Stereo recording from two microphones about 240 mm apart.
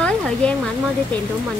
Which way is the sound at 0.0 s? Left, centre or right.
Centre.